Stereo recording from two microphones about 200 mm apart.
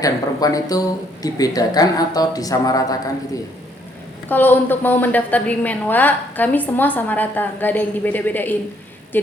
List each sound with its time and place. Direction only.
0.0 s speech: 15° left (ahead or behind)
4.3 s a woman's voice: 10° left (ahead or behind)